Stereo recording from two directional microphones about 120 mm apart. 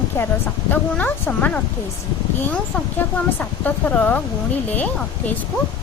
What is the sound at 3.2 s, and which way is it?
A woman's voice, 15° left (ahead or behind).